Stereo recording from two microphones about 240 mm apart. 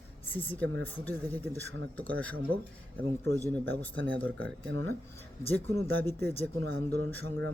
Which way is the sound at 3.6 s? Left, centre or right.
Centre.